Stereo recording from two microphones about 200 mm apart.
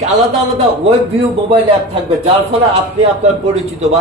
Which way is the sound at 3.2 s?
35° right (ahead or behind).